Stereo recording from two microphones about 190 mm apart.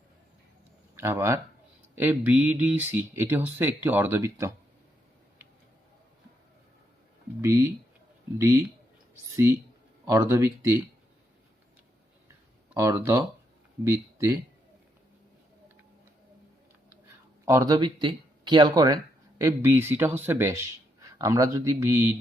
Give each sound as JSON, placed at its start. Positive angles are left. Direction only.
{"t": 0.9, "sound": "speech", "side_deg": -15}
{"t": 7.4, "sound": "speech", "side_deg": -15}
{"t": 12.7, "sound": "speech", "side_deg": -15}
{"t": 17.4, "sound": "speech", "side_deg": -15}